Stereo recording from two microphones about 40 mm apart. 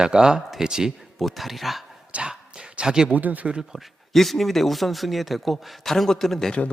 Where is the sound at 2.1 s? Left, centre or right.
Right.